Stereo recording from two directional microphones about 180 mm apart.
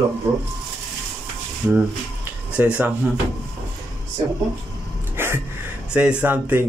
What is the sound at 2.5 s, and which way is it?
Speech, 5° right (ahead or behind).